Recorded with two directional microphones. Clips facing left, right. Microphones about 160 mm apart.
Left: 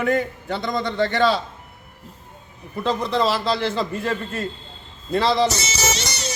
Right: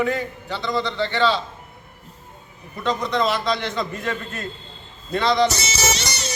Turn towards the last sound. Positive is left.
turn(degrees=-80)